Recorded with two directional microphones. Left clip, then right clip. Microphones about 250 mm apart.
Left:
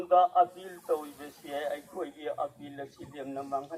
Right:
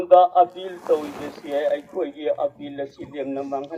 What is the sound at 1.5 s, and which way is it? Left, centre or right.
A man's voice, left.